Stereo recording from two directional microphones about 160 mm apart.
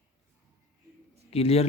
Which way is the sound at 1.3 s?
40° left (ahead or behind).